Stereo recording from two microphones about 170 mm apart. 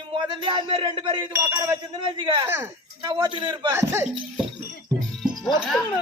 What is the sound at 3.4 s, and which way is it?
Speech, 25° right (ahead or behind).